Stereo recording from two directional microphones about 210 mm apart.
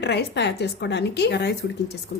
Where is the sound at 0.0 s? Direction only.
50° left (ahead or behind).